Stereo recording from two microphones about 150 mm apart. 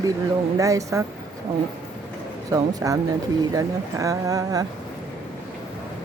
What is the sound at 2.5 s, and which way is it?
Speech, 25° right (ahead or behind).